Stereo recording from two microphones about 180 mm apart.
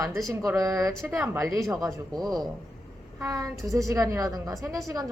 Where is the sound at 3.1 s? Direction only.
20° right (ahead or behind).